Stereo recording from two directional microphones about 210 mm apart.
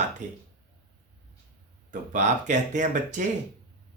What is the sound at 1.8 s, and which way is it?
Speech, 35° right (ahead or behind).